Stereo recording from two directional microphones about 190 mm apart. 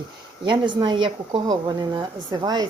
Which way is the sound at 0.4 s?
25° right (ahead or behind).